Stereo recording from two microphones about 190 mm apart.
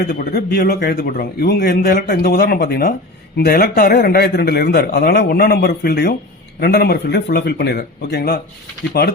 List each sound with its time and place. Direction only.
0.1 s a man's voice: 55° left (ahead or behind)